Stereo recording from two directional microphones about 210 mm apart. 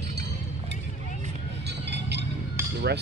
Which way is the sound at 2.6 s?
10° right (ahead or behind).